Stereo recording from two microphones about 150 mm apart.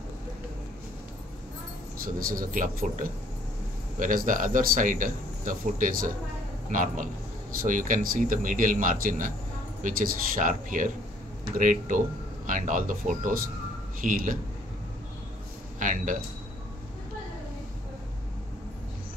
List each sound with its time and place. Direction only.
2.1 s speech: 70° right (ahead or behind)
15.8 s speech: 60° right (ahead or behind)